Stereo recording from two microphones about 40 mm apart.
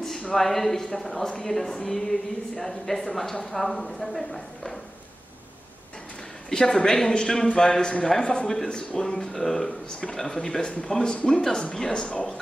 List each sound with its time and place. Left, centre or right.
0.3 s a woman's voice: centre
6.5 s a woman's voice: centre
9.8 s a woman's voice: left